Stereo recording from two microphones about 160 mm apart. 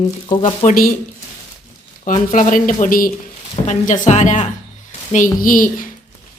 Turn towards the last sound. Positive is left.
turn(degrees=60)  # may be behind; listen again after turning